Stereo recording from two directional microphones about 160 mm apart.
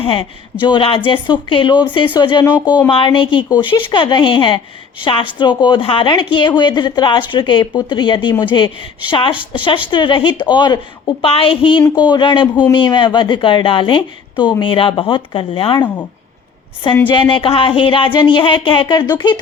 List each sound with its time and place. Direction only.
0.0 s a woman's voice: 35° left (ahead or behind)
17.1 s speech: 30° left (ahead or behind)